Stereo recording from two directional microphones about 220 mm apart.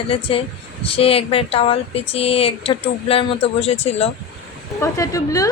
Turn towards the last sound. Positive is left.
turn(degrees=15)  # may be behind; listen again after turning